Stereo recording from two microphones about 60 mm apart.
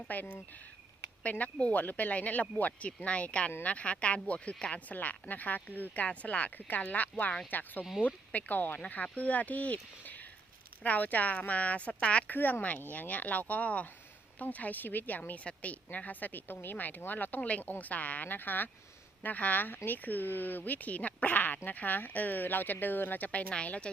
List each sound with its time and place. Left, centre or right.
0.1 s a woman's voice: left
12.4 s a woman's voice: left